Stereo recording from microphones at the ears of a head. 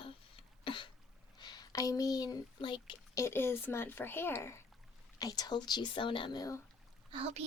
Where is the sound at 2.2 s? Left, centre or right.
Left.